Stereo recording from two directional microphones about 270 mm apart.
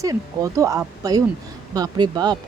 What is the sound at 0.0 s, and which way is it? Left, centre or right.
A woman's voice, centre.